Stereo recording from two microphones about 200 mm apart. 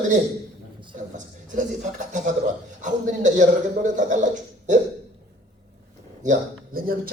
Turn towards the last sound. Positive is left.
turn(degrees=-45)  # may be behind; listen again after turning